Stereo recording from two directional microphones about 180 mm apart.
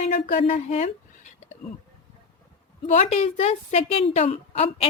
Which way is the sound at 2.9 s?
40° left (ahead or behind).